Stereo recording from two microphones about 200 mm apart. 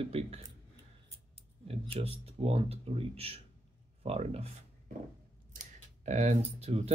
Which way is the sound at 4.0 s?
30° right (ahead or behind).